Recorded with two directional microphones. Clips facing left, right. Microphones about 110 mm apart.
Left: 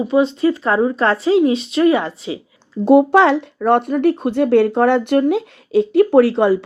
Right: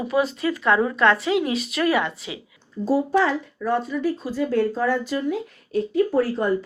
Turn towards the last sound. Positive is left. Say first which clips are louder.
# left 9 dB
turn(degrees=85)